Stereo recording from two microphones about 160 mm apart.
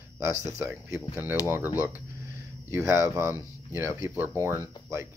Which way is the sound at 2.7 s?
15° right (ahead or behind).